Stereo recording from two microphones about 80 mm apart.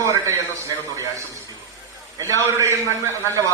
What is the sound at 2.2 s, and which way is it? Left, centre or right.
A man's voice, right.